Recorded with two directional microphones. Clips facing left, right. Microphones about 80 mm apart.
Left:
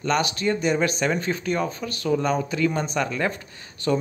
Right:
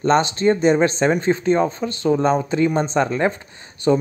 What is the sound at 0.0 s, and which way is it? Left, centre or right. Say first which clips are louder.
Speech: right 7 dB; right.